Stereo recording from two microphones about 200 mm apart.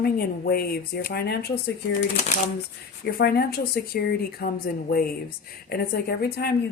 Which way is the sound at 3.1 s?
50° left (ahead or behind).